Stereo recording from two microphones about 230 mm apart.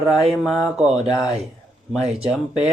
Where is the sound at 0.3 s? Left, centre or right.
Centre.